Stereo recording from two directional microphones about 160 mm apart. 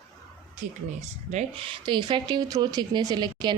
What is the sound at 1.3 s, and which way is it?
Speech, 45° right (ahead or behind).